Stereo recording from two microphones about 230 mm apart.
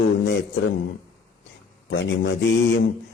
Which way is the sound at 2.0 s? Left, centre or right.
Left.